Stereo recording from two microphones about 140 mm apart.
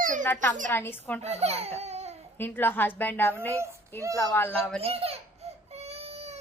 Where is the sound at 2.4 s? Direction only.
15° left (ahead or behind).